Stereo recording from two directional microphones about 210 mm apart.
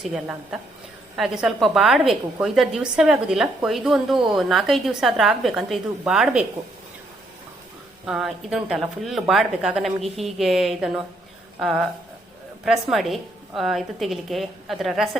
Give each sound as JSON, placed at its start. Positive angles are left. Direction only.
{"t": 0.0, "sound": "a woman's voice", "side_deg": 0}
{"t": 8.0, "sound": "a woman's voice", "side_deg": -5}